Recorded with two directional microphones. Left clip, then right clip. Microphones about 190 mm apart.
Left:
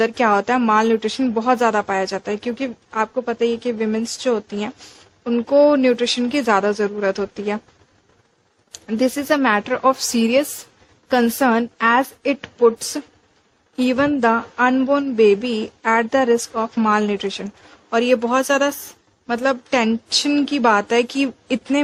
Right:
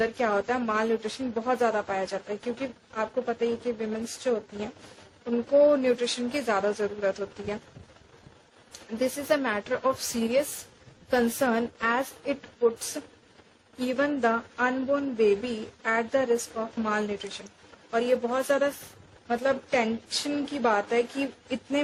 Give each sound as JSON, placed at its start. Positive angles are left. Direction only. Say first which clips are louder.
{"t": 0.0, "sound": "speech", "louder": "left 9 dB", "side_deg": 55}
{"t": 8.7, "sound": "speech", "louder": "left 9 dB", "side_deg": 50}
{"t": 13.7, "sound": "a woman's voice", "louder": "left 9 dB", "side_deg": 45}